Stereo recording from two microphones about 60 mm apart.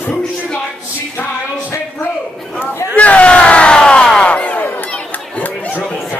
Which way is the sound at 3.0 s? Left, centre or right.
Left.